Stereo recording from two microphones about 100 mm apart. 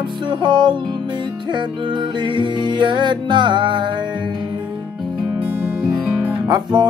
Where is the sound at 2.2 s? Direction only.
50° right (ahead or behind).